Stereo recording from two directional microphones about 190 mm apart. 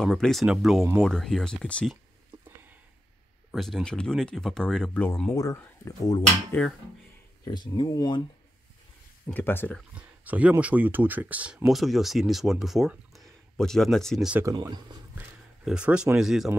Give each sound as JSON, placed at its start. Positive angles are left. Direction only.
{"t": 0.0, "sound": "speech", "side_deg": 0}
{"t": 2.3, "sound": "a sound", "side_deg": -20}
{"t": 3.5, "sound": "speech", "side_deg": 0}
{"t": 5.3, "sound": "speech", "side_deg": 15}
{"t": 7.7, "sound": "speech", "side_deg": 20}
{"t": 9.3, "sound": "speech", "side_deg": 10}
{"t": 9.9, "sound": "speech", "side_deg": -5}
{"t": 14.4, "sound": "speech", "side_deg": -20}
{"t": 15.1, "sound": "speech", "side_deg": -5}